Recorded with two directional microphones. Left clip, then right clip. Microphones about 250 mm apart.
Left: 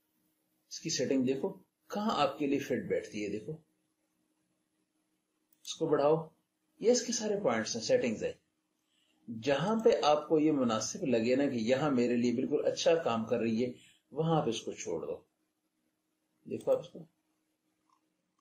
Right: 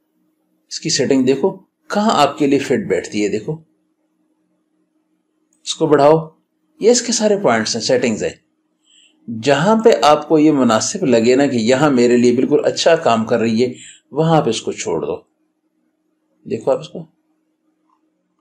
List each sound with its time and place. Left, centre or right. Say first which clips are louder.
0.7 s speech: right 17 dB; right
5.7 s speech: right 17 dB; right
9.4 s speech: right 17 dB; right
16.4 s speech: right 14 dB; right